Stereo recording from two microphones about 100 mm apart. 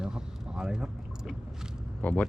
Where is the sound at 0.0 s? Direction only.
5° right (ahead or behind).